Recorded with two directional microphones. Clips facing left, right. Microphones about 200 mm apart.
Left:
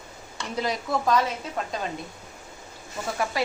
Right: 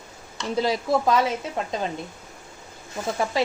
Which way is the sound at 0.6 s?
30° right (ahead or behind).